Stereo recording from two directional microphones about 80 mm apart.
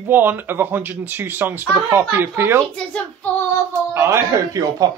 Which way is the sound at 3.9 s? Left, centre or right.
Right.